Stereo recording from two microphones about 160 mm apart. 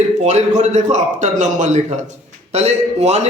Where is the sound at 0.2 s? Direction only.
45° right (ahead or behind).